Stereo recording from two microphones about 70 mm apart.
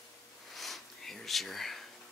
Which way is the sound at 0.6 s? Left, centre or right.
Centre.